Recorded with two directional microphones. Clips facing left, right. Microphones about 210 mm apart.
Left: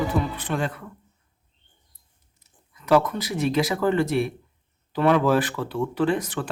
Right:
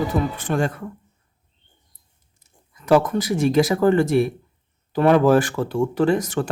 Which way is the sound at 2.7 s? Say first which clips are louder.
Right 3 dB; 45° right (ahead or behind).